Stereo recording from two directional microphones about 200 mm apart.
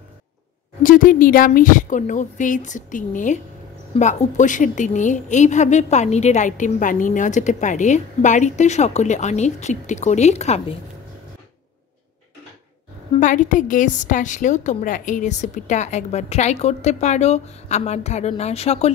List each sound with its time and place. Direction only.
0.8 s a woman's voice: 45° left (ahead or behind)
13.2 s a woman's voice: 40° left (ahead or behind)